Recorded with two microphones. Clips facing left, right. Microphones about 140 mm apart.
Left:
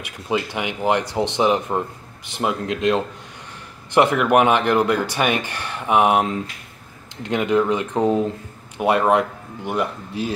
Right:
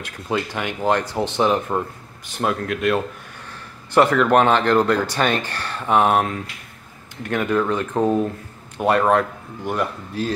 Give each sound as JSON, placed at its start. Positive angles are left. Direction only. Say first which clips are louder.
{"t": 0.0, "sound": "speech", "louder": "left 1 dB", "side_deg": 15}